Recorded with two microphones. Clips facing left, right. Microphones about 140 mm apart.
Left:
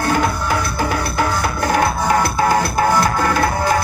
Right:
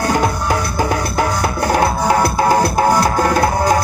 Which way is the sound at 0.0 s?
40° right (ahead or behind).